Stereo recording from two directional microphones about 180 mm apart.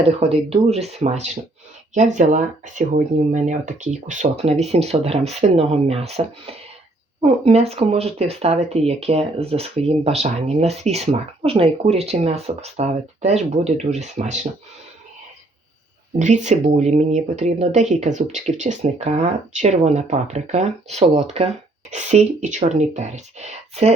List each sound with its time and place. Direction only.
0.2 s speech: 35° right (ahead or behind)
16.1 s speech: 40° right (ahead or behind)